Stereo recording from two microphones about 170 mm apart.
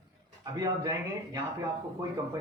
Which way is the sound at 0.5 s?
20° right (ahead or behind).